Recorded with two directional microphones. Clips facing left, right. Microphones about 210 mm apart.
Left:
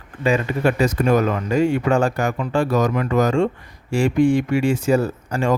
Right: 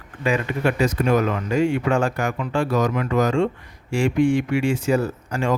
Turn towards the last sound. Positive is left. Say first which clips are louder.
# left 2 dB
turn(degrees=35)  # may be behind; listen again after turning